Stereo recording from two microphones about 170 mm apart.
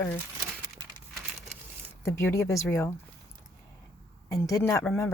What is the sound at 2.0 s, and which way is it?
Speech, 15° left (ahead or behind).